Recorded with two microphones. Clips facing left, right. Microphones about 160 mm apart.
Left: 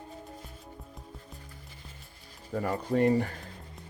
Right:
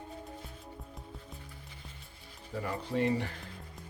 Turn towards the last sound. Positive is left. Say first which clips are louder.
# left 5 dB
turn(degrees=45)  # may be behind; listen again after turning